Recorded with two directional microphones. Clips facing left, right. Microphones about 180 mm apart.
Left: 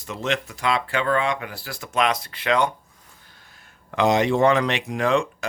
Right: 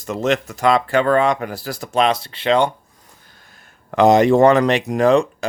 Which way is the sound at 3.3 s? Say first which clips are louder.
Right 3 dB; 45° right (ahead or behind).